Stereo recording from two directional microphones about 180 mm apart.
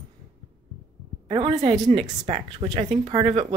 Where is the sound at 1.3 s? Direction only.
35° right (ahead or behind).